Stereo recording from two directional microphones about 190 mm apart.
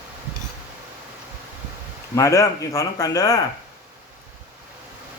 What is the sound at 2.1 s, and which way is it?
Speech, 15° left (ahead or behind).